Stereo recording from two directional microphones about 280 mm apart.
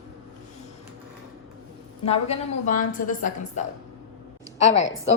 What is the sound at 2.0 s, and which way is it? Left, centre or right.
A woman's voice, left.